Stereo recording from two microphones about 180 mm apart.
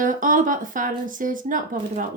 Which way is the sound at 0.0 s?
45° right (ahead or behind).